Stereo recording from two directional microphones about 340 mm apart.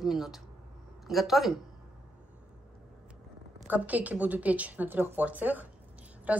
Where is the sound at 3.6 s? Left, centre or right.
Centre.